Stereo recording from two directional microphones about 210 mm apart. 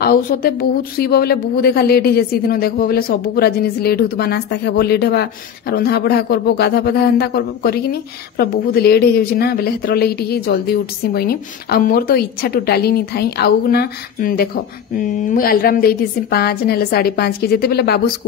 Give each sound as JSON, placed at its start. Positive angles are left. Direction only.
{"t": 0.0, "sound": "a woman's voice", "side_deg": 45}